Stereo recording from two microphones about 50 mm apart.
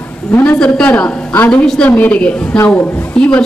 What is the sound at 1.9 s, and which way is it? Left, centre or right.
Speech, left.